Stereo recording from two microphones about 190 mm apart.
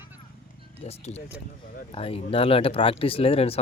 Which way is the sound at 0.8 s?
35° left (ahead or behind).